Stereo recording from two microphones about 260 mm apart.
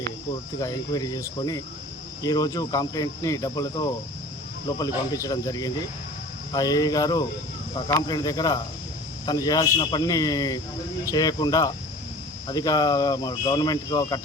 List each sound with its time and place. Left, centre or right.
0.6 s speech: centre
5.1 s speech: centre